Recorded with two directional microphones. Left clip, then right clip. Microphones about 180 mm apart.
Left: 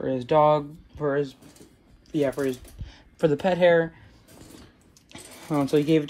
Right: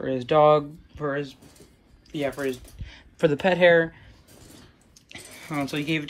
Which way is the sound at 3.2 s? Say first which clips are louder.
Right 1 dB; centre (ahead or behind).